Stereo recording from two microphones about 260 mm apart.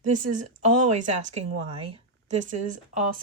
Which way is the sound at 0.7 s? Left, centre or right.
Right.